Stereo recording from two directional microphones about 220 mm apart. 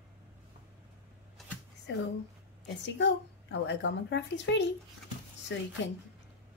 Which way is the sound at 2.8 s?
55° left (ahead or behind).